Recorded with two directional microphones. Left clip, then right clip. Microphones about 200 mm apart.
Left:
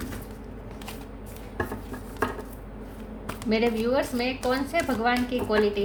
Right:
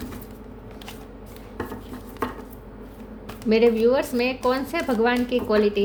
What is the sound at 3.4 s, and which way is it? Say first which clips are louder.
A woman's voice: right 7 dB; 40° right (ahead or behind).